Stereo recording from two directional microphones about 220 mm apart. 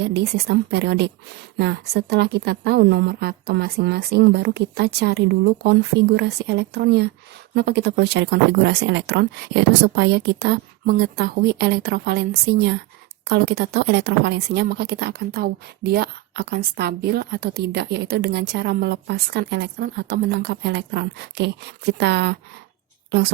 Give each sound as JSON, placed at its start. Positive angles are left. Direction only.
{"t": 0.0, "sound": "speech", "side_deg": -50}